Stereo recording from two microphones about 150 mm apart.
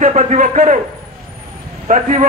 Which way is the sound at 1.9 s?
55° right (ahead or behind).